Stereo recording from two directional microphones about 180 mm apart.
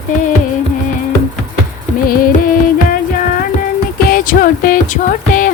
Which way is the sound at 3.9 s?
55° left (ahead or behind).